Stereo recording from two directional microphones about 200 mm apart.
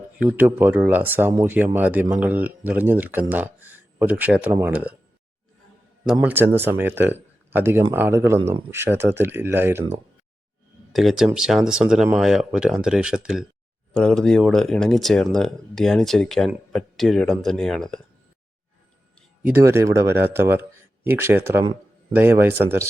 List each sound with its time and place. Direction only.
0.2 s speech: 10° right (ahead or behind)
6.2 s speech: 10° right (ahead or behind)
8.4 s speech: 25° right (ahead or behind)
8.7 s speech: 10° right (ahead or behind)
10.9 s speech: centre (ahead or behind)
19.4 s speech: 10° right (ahead or behind)